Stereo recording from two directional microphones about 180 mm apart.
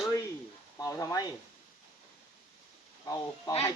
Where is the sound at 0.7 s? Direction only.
20° left (ahead or behind).